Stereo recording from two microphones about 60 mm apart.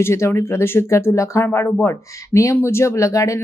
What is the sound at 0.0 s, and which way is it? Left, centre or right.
Speech, left.